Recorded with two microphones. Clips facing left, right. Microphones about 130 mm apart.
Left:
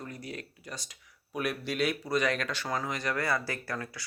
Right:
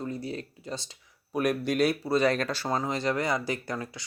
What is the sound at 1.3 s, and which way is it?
Speech, 45° right (ahead or behind).